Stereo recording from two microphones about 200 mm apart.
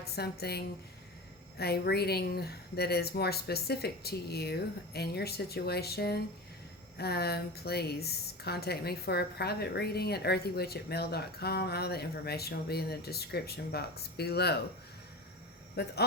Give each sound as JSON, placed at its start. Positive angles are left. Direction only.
{"t": 0.0, "sound": "a woman's voice", "side_deg": 55}
{"t": 15.7, "sound": "a man's voice", "side_deg": 55}